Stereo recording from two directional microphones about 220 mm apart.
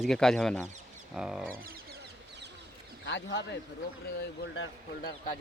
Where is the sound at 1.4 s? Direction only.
40° right (ahead or behind).